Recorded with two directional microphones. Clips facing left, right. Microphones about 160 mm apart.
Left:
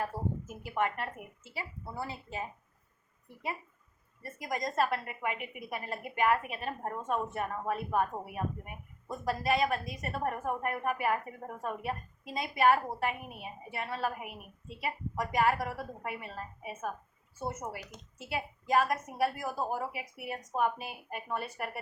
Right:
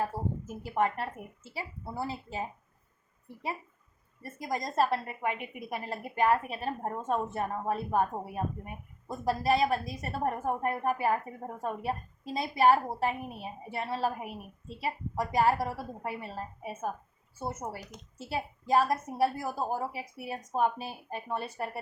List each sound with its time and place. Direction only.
0.0 s speech: 35° right (ahead or behind)
4.2 s a woman's voice: 30° right (ahead or behind)